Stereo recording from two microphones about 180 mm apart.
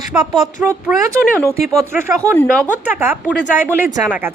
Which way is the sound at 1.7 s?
15° right (ahead or behind).